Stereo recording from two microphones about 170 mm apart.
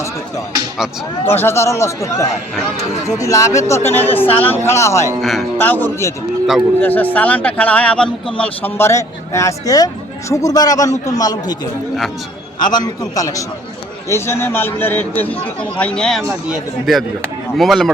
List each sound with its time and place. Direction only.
1.2 s speech: 15° left (ahead or behind)
5.2 s a man's voice: centre (ahead or behind)
5.5 s a man's voice: 10° left (ahead or behind)
12.7 s a man's voice: 25° left (ahead or behind); by 17.9 s centre (ahead or behind)